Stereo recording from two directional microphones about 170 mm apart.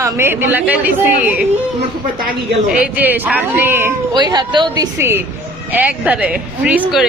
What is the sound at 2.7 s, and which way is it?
A woman's voice, 10° right (ahead or behind).